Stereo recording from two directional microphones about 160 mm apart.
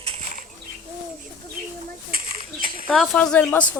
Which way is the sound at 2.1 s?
60° right (ahead or behind).